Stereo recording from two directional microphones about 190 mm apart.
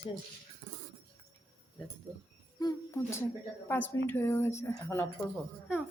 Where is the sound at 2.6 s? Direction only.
20° left (ahead or behind).